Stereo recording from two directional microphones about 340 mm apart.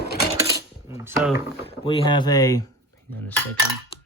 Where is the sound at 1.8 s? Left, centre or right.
Centre.